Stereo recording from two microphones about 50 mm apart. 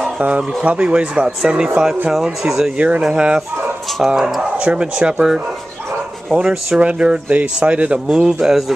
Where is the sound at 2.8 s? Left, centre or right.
Right; by 4.4 s centre.